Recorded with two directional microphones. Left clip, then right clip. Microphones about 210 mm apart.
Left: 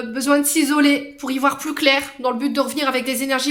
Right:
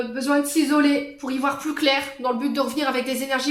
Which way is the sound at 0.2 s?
45° left (ahead or behind).